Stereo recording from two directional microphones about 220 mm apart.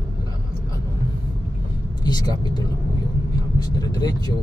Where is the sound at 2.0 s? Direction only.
20° left (ahead or behind).